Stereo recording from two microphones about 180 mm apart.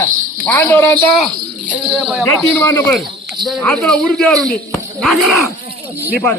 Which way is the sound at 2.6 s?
15° left (ahead or behind).